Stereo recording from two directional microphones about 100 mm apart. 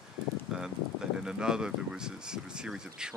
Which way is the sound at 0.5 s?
5° right (ahead or behind).